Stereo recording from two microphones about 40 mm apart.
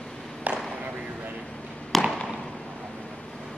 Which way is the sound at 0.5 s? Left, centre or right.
Right.